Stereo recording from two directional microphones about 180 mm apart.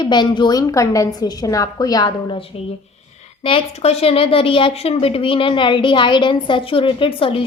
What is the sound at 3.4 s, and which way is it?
A woman's voice, 35° left (ahead or behind).